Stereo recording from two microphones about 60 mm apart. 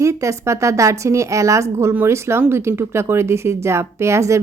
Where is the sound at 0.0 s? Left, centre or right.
Right.